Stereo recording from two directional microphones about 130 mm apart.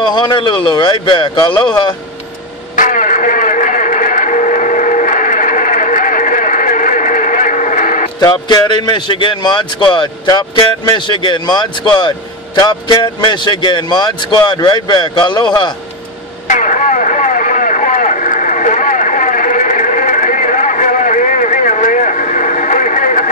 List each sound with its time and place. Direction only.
0.0 s a man's voice: 35° left (ahead or behind)
2.7 s music: 85° left
8.2 s a man's voice: 35° left (ahead or behind)
16.4 s vehicle: 75° left (ahead or behind)